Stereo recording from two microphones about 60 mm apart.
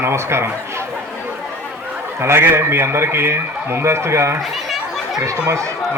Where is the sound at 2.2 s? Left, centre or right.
Right.